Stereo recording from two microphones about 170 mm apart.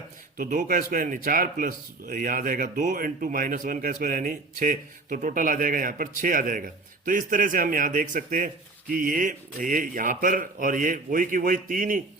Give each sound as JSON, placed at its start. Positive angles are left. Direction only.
{"t": 0.3, "sound": "a man's voice", "side_deg": -55}